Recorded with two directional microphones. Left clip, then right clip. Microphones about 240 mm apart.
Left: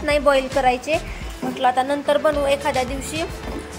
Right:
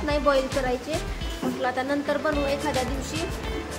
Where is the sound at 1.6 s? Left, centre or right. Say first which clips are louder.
Left 8 dB; centre.